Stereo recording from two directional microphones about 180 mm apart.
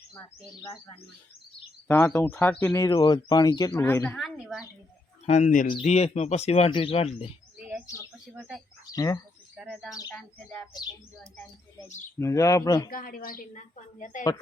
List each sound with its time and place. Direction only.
0.2 s speech: 20° left (ahead or behind)
4.2 s speech: centre (ahead or behind)
5.2 s a woman's voice: 40° left (ahead or behind)
7.7 s speech: 10° right (ahead or behind)
8.9 s speech: 20° left (ahead or behind)
9.6 s speech: centre (ahead or behind)
9.9 s speech: 20° left (ahead or behind)
10.2 s speech: 5° left (ahead or behind)
12.2 s speech: 15° left (ahead or behind)
12.9 s a woman's voice: 50° left (ahead or behind)